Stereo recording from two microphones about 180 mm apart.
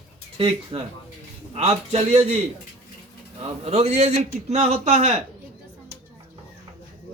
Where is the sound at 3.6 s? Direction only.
35° right (ahead or behind).